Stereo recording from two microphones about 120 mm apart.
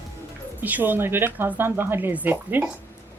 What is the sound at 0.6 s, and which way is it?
Speech, 15° right (ahead or behind).